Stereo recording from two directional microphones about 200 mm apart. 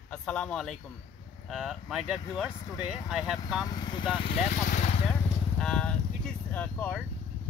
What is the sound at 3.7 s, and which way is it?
Speech, 20° left (ahead or behind).